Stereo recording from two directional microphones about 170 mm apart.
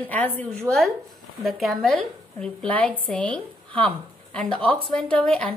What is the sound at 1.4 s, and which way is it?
A woman's voice, centre (ahead or behind).